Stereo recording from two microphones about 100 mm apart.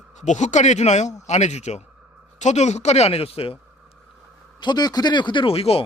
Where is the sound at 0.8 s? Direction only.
90° left; by 3.6 s 75° left (ahead or behind).